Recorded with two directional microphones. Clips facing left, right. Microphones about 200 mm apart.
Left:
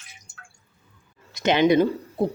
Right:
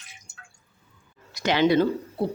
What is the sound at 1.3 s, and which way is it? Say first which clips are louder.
Speech: left 2 dB; 20° left (ahead or behind).